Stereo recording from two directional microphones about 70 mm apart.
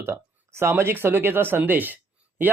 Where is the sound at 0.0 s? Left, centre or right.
Right.